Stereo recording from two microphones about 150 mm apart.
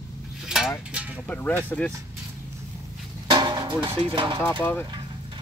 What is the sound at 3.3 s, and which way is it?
Drum, 30° right (ahead or behind).